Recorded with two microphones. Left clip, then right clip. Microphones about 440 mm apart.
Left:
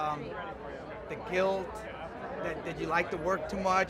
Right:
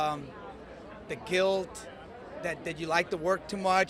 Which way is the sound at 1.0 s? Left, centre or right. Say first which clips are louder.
Right 3 dB; right.